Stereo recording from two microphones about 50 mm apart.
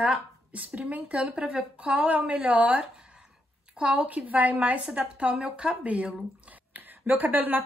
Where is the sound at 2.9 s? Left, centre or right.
Centre.